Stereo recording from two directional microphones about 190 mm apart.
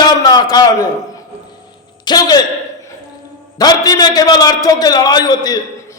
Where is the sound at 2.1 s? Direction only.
20° left (ahead or behind).